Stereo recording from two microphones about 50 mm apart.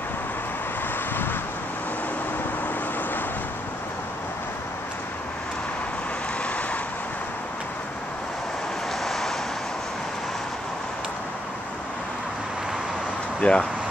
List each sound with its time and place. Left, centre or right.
9.0 s vehicle: centre
13.4 s speech: centre